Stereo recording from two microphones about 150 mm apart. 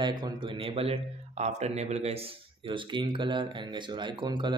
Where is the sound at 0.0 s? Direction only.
30° right (ahead or behind).